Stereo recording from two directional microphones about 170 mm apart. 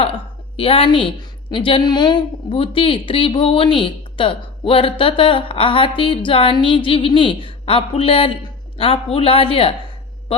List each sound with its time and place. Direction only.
0.0 s a woman's voice: 35° left (ahead or behind)